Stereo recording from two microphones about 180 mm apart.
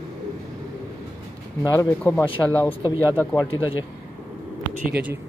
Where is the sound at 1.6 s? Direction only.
20° left (ahead or behind).